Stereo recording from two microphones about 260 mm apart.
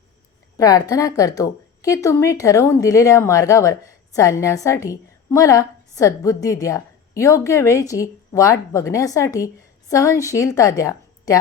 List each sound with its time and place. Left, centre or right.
0.5 s a woman's voice: centre